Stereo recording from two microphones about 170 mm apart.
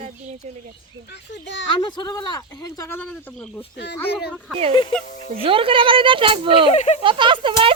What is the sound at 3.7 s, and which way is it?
Speech, 85° left.